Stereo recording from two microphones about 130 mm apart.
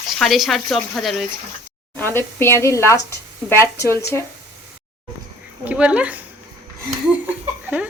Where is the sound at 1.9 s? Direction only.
15° left (ahead or behind).